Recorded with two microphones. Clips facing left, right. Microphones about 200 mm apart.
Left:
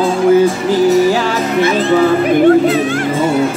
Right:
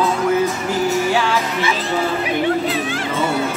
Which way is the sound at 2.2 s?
50° left (ahead or behind).